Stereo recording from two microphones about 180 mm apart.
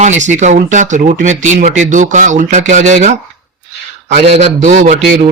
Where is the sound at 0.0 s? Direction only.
40° right (ahead or behind).